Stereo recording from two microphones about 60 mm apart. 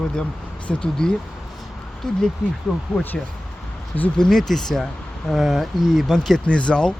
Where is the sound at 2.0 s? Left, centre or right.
Centre.